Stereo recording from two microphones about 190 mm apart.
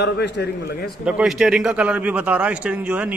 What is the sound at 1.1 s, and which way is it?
A man's voice, 5° right (ahead or behind).